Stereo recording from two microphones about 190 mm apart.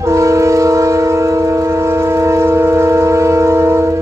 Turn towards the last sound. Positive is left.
turn(degrees=-15)  # may be behind; listen again after turning